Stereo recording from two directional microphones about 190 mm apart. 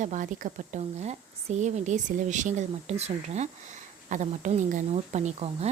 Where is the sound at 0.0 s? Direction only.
40° right (ahead or behind).